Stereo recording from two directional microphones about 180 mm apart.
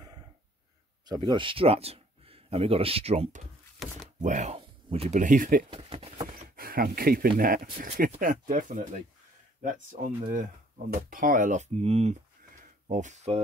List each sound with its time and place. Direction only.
1.0 s speech: 20° right (ahead or behind); by 5.6 s 45° right (ahead or behind)
5.7 s speech: 30° right (ahead or behind)
6.5 s speech: 55° right (ahead or behind)
10.3 s speech: 50° right (ahead or behind)